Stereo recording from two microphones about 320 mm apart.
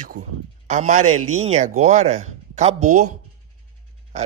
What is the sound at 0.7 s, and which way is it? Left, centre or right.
A man's voice, right.